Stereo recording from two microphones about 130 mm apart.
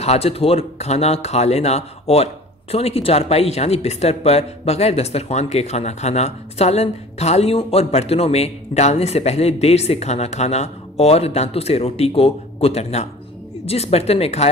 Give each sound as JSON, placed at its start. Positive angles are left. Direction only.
{"t": 0.0, "sound": "speech", "side_deg": 55}